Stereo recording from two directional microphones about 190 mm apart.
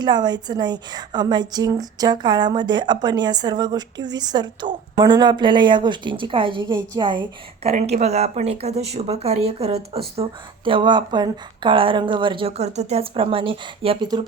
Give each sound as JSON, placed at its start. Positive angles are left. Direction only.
{"t": 0.0, "sound": "a woman's voice", "side_deg": -20}